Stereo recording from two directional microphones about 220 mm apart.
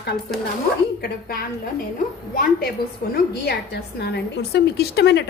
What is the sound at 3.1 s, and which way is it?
A woman's voice, 50° left (ahead or behind).